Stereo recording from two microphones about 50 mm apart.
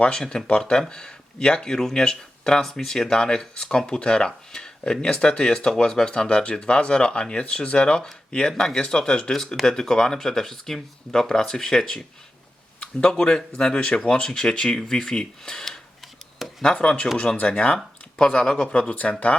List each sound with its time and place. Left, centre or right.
0.0 s speech: centre
6.1 s speech: left
16.4 s a sound: centre
16.7 s speech: centre